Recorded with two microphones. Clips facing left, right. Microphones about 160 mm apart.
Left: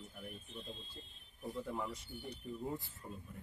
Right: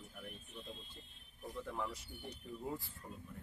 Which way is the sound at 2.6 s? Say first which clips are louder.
Left 1 dB; centre (ahead or behind).